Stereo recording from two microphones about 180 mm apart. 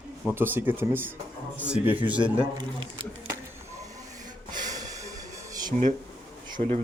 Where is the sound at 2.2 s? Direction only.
30° right (ahead or behind).